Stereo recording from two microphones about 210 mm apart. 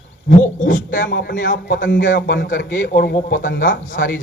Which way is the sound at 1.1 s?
55° left (ahead or behind).